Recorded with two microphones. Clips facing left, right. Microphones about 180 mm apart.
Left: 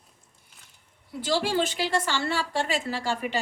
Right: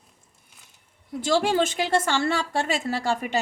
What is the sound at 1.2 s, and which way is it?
A woman's voice, 45° right (ahead or behind).